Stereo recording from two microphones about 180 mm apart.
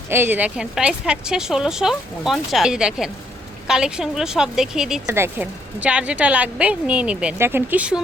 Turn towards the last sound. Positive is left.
turn(degrees=-5)  # may be behind; listen again after turning